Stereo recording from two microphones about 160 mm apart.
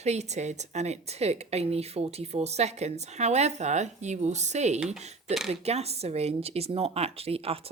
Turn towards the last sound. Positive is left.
turn(degrees=-40)  # may be behind; listen again after turning